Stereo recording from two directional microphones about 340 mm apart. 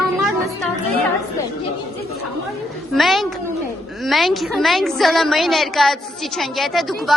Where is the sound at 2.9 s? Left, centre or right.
Centre.